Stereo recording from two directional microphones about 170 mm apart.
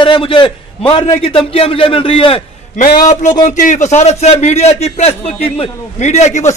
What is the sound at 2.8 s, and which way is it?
A man's voice, 45° left (ahead or behind).